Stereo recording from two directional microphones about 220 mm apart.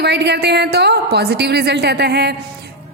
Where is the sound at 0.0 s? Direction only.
50° right (ahead or behind).